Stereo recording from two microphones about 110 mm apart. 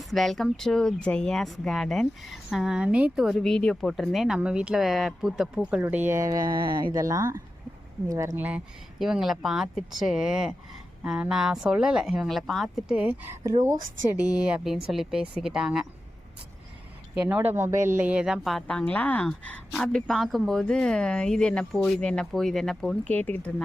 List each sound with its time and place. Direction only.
0.1 s a woman's voice: centre (ahead or behind)
5.8 s speech: 20° right (ahead or behind); by 7.0 s 45° right (ahead or behind)
7.0 s speech: 30° right (ahead or behind)
8.4 s speech: 15° right (ahead or behind)
9.0 s a woman's voice: 5° right (ahead or behind)
17.2 s speech: 15° right (ahead or behind)
18.4 s a woman's voice: 5° left (ahead or behind)
23.0 s speech: 15° left (ahead or behind)